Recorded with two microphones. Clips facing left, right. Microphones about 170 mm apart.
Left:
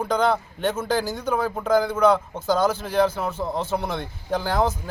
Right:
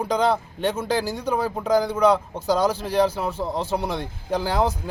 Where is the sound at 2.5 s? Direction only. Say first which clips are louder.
Even; 35° right (ahead or behind).